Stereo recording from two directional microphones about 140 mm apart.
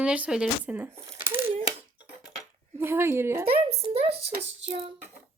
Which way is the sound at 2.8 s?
15° right (ahead or behind).